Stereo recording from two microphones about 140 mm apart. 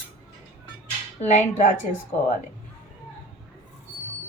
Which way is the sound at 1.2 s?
60° left (ahead or behind).